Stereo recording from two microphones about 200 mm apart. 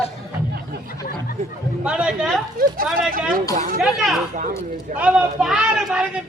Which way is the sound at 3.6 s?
45° right (ahead or behind).